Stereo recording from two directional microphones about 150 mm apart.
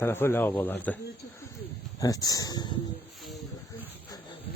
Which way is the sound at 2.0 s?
25° left (ahead or behind).